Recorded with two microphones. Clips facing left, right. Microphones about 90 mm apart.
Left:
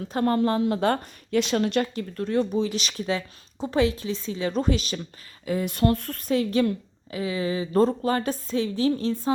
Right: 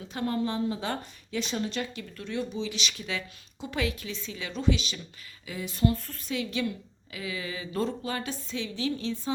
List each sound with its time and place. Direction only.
0.1 s speech: 50° left (ahead or behind)
2.0 s speech: 40° left (ahead or behind)
5.7 s speech: 65° left (ahead or behind)
6.3 s speech: 40° left (ahead or behind)